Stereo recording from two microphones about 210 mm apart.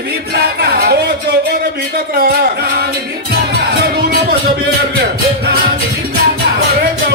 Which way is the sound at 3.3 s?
50° right (ahead or behind).